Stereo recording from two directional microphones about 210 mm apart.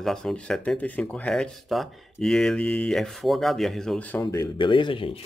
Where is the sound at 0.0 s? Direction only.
5° left (ahead or behind); by 5.2 s 25° left (ahead or behind).